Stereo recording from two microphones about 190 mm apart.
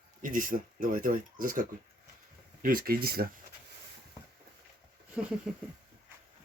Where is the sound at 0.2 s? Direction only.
45° right (ahead or behind).